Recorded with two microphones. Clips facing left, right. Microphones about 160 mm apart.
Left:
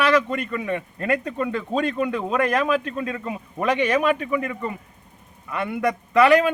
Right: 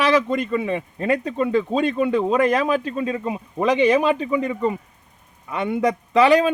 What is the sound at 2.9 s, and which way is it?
Speech, 15° right (ahead or behind).